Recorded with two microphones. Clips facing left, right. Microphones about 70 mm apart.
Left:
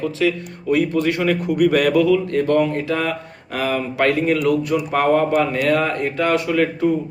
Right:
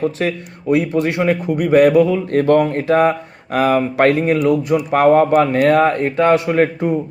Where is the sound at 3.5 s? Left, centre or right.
Right.